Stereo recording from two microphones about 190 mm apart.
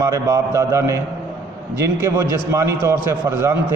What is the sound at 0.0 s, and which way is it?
A man's voice, 15° right (ahead or behind).